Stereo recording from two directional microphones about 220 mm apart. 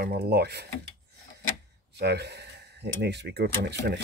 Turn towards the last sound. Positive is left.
turn(degrees=-50)  # may be behind; listen again after turning